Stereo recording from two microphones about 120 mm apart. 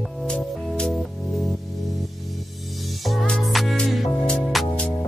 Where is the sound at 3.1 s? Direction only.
5° left (ahead or behind).